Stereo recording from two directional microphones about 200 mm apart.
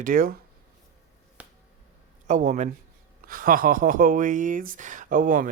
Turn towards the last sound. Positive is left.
turn(degrees=-40)  # may be behind; listen again after turning